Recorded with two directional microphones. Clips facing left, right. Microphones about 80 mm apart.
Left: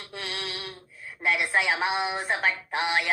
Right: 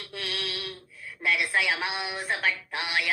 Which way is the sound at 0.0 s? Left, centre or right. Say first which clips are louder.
Even; left.